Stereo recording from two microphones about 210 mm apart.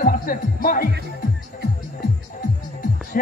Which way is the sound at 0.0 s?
40° left (ahead or behind).